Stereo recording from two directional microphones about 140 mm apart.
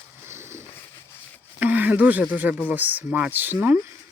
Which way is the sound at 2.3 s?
10° right (ahead or behind).